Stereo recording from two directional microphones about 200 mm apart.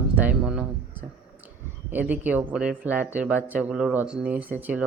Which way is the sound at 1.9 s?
10° right (ahead or behind).